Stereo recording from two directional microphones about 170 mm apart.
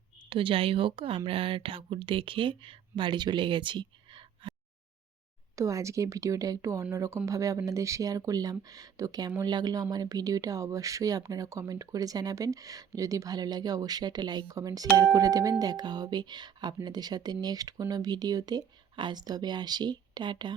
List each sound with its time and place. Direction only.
0.3 s speech: 30° right (ahead or behind)
5.5 s speech: 20° right (ahead or behind)